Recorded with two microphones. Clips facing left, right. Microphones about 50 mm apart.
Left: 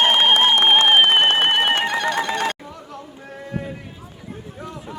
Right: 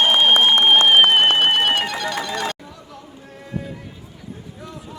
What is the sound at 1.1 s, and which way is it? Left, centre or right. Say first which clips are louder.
Fire alarm: right 1 dB; left.